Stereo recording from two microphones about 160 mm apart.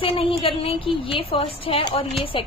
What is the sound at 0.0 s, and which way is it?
A woman's voice, 35° left (ahead or behind).